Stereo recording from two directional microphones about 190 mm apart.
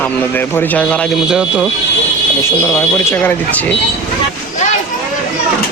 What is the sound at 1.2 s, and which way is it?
Speech, 5° right (ahead or behind).